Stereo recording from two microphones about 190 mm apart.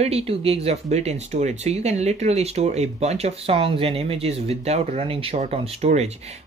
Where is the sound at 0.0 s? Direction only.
30° right (ahead or behind).